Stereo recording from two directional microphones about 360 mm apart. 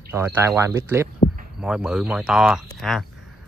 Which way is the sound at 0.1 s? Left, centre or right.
Centre.